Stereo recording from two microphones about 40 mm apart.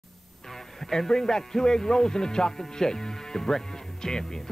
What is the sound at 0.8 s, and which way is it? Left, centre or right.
Speech, centre.